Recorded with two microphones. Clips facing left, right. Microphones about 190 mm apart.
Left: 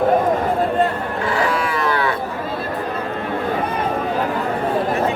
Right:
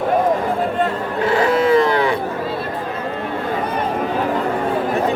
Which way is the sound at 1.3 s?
20° right (ahead or behind).